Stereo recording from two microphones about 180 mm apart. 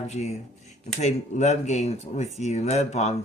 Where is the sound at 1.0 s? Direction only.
40° left (ahead or behind).